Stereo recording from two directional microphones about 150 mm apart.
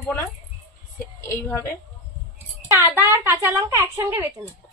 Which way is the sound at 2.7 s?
15° right (ahead or behind).